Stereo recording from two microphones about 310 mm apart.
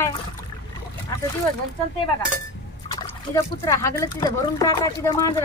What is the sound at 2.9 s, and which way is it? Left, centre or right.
Speech, centre.